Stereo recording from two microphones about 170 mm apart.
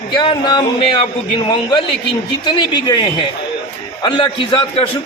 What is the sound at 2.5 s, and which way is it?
Speech, 25° left (ahead or behind).